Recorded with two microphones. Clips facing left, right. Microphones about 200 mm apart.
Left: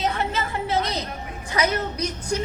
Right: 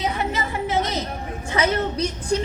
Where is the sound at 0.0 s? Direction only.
15° right (ahead or behind).